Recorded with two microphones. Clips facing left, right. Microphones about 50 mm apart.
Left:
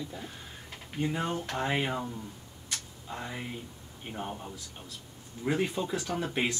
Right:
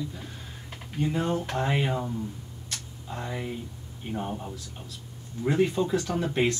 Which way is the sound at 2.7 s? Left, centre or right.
Centre.